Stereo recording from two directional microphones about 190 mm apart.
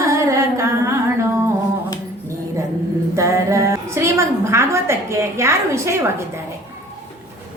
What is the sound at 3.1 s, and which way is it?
A woman's voice, 15° right (ahead or behind).